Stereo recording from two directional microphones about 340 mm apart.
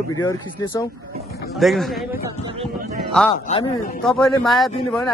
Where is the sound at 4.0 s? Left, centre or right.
Centre.